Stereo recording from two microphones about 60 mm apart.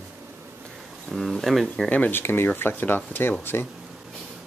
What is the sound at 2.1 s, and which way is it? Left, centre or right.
Speech, left.